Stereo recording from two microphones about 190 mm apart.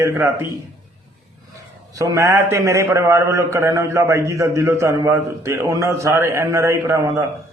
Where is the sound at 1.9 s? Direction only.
15° right (ahead or behind).